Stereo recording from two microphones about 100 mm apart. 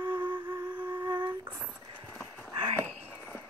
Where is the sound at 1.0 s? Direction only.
55° right (ahead or behind).